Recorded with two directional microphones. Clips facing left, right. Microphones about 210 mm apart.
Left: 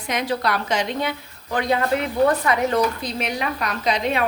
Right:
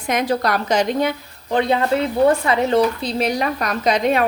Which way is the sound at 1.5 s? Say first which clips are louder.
Right 3 dB; 30° right (ahead or behind).